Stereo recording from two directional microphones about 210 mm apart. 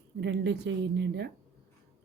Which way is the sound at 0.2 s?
55° right (ahead or behind).